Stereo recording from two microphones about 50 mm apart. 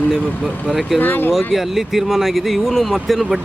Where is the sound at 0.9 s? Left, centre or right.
Left.